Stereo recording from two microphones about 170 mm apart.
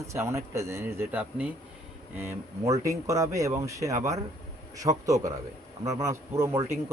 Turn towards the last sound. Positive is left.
turn(degrees=-15)  # may be behind; listen again after turning